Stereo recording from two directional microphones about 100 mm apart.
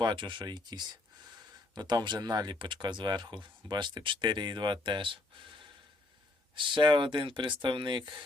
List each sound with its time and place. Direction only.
0.0 s speech: 50° right (ahead or behind)